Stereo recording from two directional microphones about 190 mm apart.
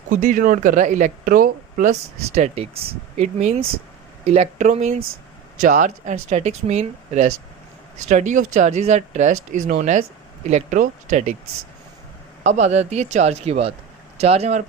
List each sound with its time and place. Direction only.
0.1 s speech: 45° right (ahead or behind)
12.4 s speech: 40° right (ahead or behind)